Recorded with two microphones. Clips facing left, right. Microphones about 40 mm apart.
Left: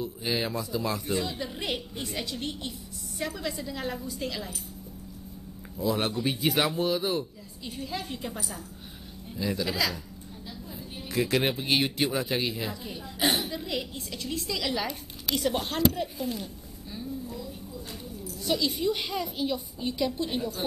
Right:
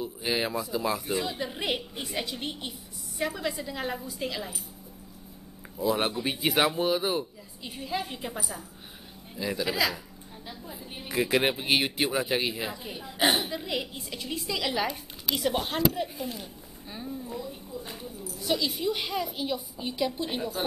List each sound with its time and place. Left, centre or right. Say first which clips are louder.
0.0 s speech: right 1 dB; centre
5.8 s speech: right 1 dB; centre
16.9 s a sound: even; right
18.2 s speech: left 1 dB; centre